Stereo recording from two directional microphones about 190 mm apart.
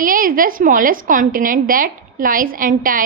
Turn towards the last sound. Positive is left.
turn(degrees=-45)  # may be behind; listen again after turning